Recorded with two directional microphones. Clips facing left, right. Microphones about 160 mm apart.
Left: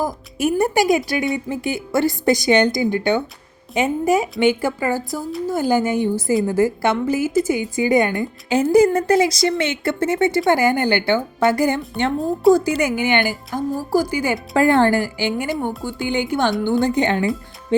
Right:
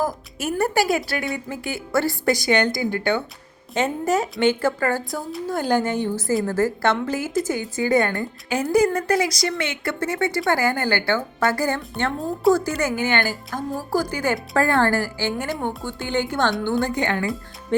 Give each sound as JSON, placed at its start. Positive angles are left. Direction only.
{"t": 0.0, "sound": "a woman's voice", "side_deg": 15}
{"t": 12.4, "sound": "a woman's voice", "side_deg": 0}
{"t": 12.8, "sound": "a woman's voice", "side_deg": 15}
{"t": 15.4, "sound": "a woman's voice", "side_deg": 0}